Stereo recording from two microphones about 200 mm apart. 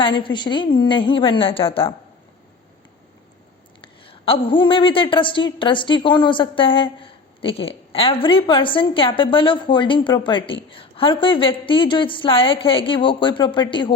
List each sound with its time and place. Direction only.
0.0 s a woman's voice: 25° left (ahead or behind)
3.8 s a woman's voice: 25° left (ahead or behind)